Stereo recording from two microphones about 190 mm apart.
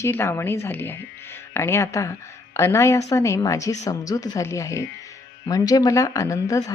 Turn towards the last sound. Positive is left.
turn(degrees=15)  # may be behind; listen again after turning